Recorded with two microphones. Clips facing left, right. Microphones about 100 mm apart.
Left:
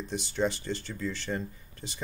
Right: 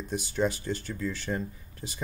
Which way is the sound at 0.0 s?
5° right (ahead or behind).